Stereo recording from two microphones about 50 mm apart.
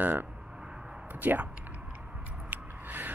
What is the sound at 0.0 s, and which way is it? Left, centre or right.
Speech, right.